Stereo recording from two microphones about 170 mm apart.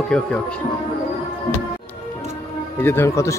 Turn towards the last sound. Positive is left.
turn(degrees=15)  # may be behind; listen again after turning